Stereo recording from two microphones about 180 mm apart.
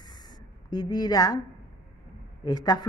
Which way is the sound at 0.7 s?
25° left (ahead or behind).